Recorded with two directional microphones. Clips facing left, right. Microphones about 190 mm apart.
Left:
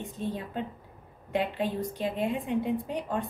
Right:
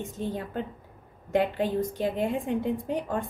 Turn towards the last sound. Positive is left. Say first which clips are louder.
# right 2 dB
turn(degrees=-45)  # may be behind; listen again after turning